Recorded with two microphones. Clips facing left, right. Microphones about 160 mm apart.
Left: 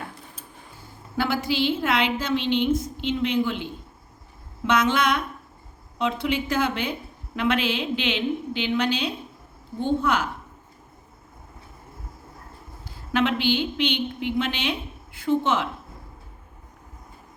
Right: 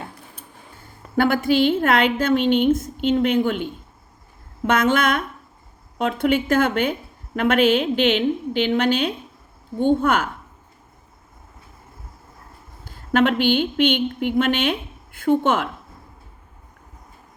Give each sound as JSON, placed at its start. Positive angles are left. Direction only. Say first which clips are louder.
{"t": 1.1, "sound": "a woman's voice", "louder": "right 7 dB", "side_deg": -55}
{"t": 4.6, "sound": "a woman's voice", "louder": "right 3 dB", "side_deg": -50}
{"t": 12.8, "sound": "speech", "louder": "right 5 dB", "side_deg": -50}